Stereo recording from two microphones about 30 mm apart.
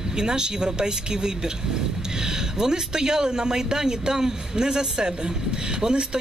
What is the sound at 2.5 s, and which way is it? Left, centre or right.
Speech, right.